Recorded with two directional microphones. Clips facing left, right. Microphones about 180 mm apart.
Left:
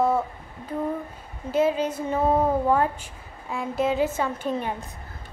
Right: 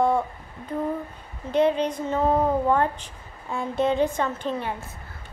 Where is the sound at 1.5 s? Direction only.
5° left (ahead or behind).